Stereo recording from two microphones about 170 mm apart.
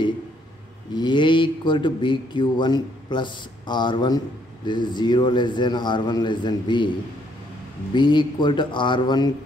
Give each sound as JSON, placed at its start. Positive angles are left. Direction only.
{"t": 0.9, "sound": "speech", "side_deg": 25}
{"t": 7.9, "sound": "speech", "side_deg": 25}